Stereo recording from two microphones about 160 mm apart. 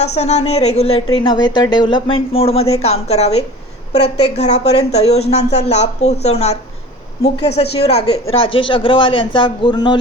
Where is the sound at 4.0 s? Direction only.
90° left.